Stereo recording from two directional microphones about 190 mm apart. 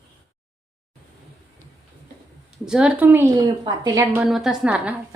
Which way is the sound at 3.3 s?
20° right (ahead or behind).